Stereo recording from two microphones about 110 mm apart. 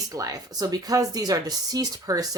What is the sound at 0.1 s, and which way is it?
Speech, 35° right (ahead or behind).